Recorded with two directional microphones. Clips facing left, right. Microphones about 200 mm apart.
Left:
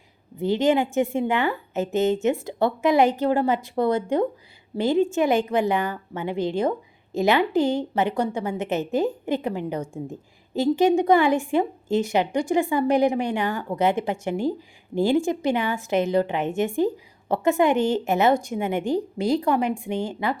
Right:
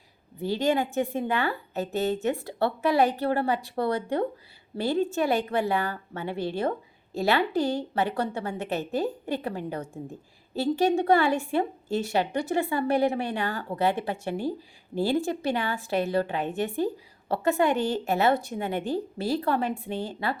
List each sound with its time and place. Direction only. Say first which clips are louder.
0.4 s a woman's voice: left 5 dB; 20° left (ahead or behind)